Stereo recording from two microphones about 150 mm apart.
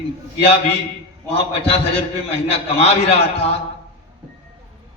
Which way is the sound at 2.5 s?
40° left (ahead or behind).